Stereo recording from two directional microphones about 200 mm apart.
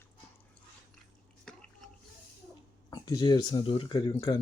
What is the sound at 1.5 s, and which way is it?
Drip, 5° left (ahead or behind).